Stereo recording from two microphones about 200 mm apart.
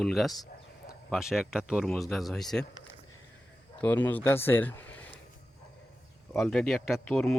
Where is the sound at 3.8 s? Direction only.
10° left (ahead or behind).